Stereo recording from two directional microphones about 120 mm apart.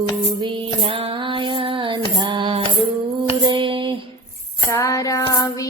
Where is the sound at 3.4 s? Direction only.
40° right (ahead or behind).